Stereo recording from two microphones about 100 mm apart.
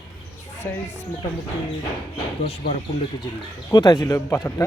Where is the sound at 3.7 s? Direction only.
40° left (ahead or behind).